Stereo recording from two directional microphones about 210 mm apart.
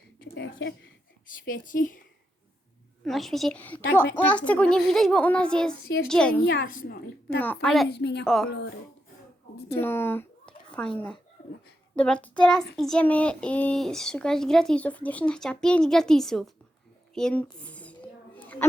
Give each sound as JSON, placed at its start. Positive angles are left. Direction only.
{"t": 0.2, "sound": "a sound", "side_deg": 55}
{"t": 1.5, "sound": "a woman's voice", "side_deg": 40}
{"t": 3.0, "sound": "a child's voice", "side_deg": 0}
{"t": 6.6, "sound": "a woman's voice", "side_deg": 45}
{"t": 7.3, "sound": "a child's voice", "side_deg": 10}
{"t": 7.9, "sound": "a woman's voice", "side_deg": 55}
{"t": 8.2, "sound": "a child's voice", "side_deg": 0}
{"t": 8.4, "sound": "speech", "side_deg": 55}
{"t": 9.7, "sound": "a child's voice", "side_deg": 10}
{"t": 17.2, "sound": "a sound", "side_deg": 5}